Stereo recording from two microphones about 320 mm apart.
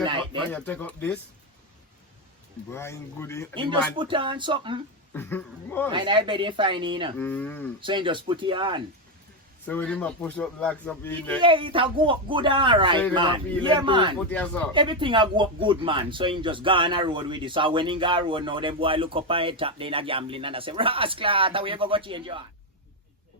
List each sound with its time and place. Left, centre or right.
0.0 s a sound: centre
0.5 s a man's voice: centre
2.7 s speech: centre
3.5 s speech: centre
5.1 s speech: centre
5.9 s speech: centre
7.2 s a man's voice: centre
7.8 s speech: centre
9.6 s a man's voice: centre
11.3 s speech: centre
14.3 s a man's voice: centre
14.7 s speech: centre